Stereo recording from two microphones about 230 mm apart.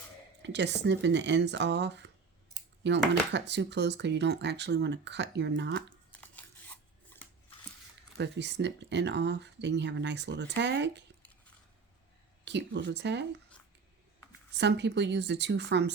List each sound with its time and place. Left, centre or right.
0.4 s speech: right
6.1 s scissors: centre
8.2 s speech: right
12.5 s speech: right
14.5 s speech: right